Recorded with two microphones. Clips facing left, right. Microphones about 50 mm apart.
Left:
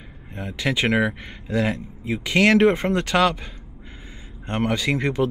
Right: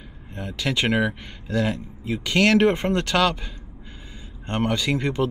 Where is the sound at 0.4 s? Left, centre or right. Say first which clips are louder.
Left 1 dB; centre.